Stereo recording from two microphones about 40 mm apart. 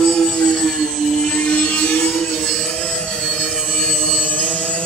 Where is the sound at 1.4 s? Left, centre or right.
Left.